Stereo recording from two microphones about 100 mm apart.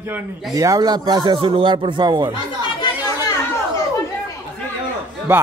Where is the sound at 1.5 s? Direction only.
65° right (ahead or behind); by 2.3 s 45° right (ahead or behind).